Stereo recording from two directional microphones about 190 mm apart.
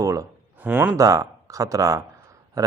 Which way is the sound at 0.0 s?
15° right (ahead or behind).